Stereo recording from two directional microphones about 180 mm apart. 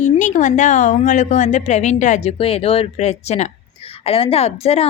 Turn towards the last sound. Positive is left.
turn(degrees=35)  # may be behind; listen again after turning